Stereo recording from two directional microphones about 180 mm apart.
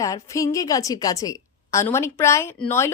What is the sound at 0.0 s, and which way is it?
Speech, 20° left (ahead or behind).